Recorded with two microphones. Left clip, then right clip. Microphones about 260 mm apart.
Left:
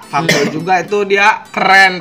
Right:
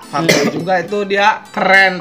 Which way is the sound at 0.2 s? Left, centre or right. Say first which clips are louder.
Even; centre.